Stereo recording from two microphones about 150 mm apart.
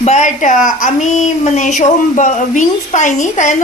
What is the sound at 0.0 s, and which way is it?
Speech, 50° left (ahead or behind).